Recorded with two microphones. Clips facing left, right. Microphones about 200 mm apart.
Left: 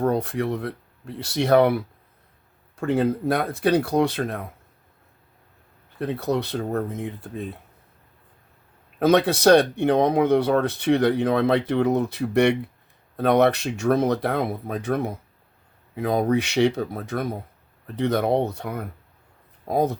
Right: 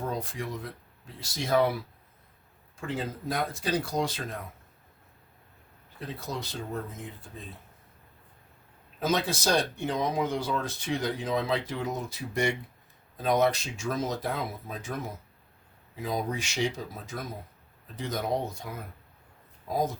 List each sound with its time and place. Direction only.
0.0 s speech: 65° left (ahead or behind)
6.0 s speech: 65° left (ahead or behind)
9.0 s speech: 65° left (ahead or behind)